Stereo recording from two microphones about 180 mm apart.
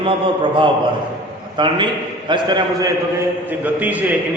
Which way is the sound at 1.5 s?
25° right (ahead or behind).